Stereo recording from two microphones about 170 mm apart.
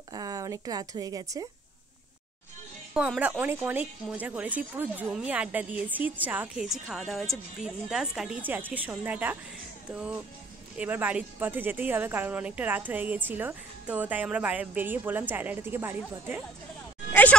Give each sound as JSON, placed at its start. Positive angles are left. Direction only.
{"t": 0.1, "sound": "speech", "side_deg": -20}
{"t": 2.9, "sound": "speech", "side_deg": -5}
{"t": 17.1, "sound": "a sound", "side_deg": 10}